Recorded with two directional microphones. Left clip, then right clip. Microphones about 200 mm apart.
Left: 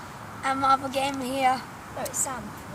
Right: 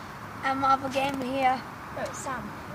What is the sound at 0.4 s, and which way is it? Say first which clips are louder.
A woman's voice: left 2 dB; centre (ahead or behind).